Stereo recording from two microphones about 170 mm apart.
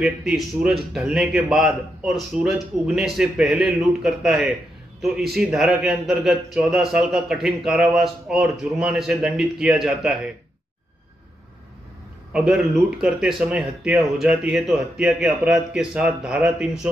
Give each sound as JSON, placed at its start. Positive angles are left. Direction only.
{"t": 0.0, "sound": "speech", "side_deg": -5}
{"t": 12.3, "sound": "speech", "side_deg": -5}